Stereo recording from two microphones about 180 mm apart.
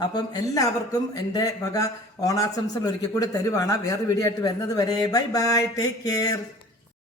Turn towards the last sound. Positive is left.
turn(degrees=20)  # may be behind; listen again after turning